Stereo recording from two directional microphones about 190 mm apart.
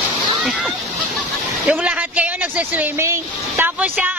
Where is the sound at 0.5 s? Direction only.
5° right (ahead or behind).